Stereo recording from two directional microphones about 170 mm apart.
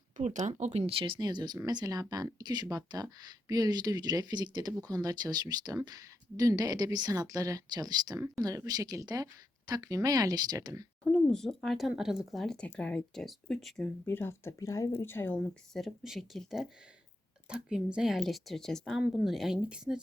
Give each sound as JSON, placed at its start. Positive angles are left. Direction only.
{"t": 0.2, "sound": "speech", "side_deg": -45}
{"t": 11.0, "sound": "speech", "side_deg": 5}
{"t": 14.0, "sound": "speech", "side_deg": 15}
{"t": 15.7, "sound": "speech", "side_deg": 0}